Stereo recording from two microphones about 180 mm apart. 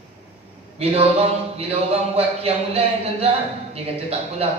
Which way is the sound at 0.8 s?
35° right (ahead or behind).